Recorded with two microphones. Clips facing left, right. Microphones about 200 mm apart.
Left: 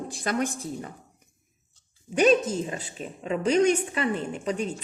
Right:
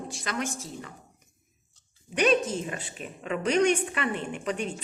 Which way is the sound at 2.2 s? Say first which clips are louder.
Left 3 dB; 40° left (ahead or behind).